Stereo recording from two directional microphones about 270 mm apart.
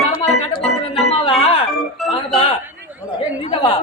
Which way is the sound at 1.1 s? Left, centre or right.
Left.